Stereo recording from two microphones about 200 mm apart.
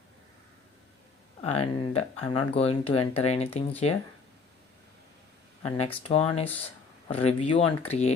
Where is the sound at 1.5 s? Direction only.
30° left (ahead or behind).